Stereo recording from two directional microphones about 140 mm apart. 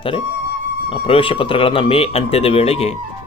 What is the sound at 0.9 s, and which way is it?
A man's voice, 40° left (ahead or behind).